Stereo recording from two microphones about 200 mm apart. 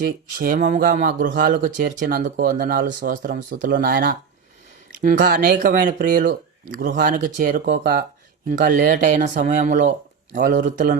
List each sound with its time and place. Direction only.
0.3 s a man's voice: 45° right (ahead or behind)